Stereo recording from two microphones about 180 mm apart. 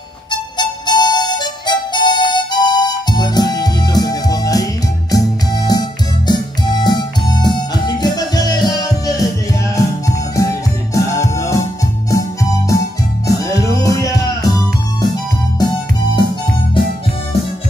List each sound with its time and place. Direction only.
0.3 s harmonica: 25° left (ahead or behind)
5.1 s music: 20° left (ahead or behind)
12.1 s organ: 20° left (ahead or behind)
13.3 s music: 20° left (ahead or behind)
15.6 s music: 20° left (ahead or behind)